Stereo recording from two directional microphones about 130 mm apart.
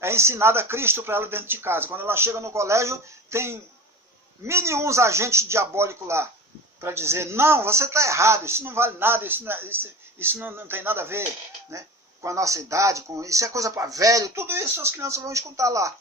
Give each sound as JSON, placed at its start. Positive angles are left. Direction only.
{"t": 0.0, "sound": "speech", "side_deg": -20}